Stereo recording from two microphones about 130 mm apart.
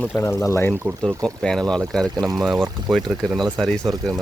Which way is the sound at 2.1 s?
30° right (ahead or behind).